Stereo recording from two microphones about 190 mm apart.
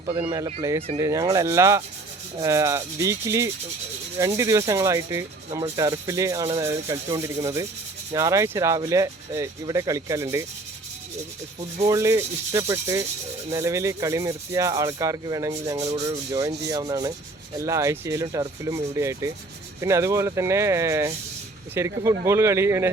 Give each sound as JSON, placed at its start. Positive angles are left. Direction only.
{"t": 0.0, "sound": "speech", "side_deg": -30}
{"t": 0.9, "sound": "rub", "side_deg": -15}
{"t": 11.9, "sound": "rub", "side_deg": -15}
{"t": 15.8, "sound": "rub", "side_deg": -35}
{"t": 16.0, "sound": "rub", "side_deg": -15}
{"t": 16.6, "sound": "speech", "side_deg": -20}
{"t": 17.6, "sound": "rub", "side_deg": -15}